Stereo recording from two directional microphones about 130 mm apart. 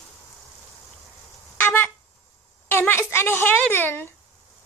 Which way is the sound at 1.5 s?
15° left (ahead or behind).